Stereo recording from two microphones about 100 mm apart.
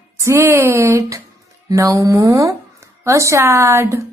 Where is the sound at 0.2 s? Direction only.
25° right (ahead or behind).